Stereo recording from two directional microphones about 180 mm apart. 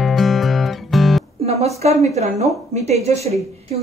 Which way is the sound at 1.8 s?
35° right (ahead or behind).